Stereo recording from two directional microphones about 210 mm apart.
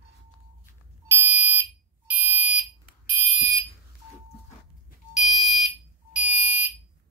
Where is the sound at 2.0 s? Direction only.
5° right (ahead or behind).